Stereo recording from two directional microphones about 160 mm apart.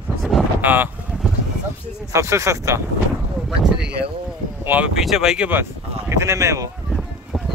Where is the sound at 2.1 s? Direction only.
15° right (ahead or behind).